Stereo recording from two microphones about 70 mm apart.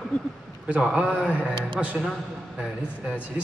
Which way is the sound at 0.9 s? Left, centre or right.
Centre.